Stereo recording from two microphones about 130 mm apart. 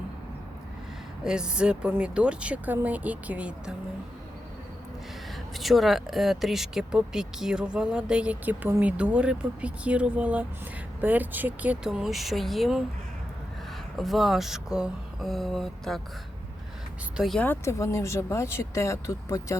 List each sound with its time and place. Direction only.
1.2 s speech: 5° right (ahead or behind)
5.5 s speech: centre (ahead or behind)
13.9 s speech: centre (ahead or behind)
17.2 s speech: centre (ahead or behind)
17.4 s speech: 20° left (ahead or behind)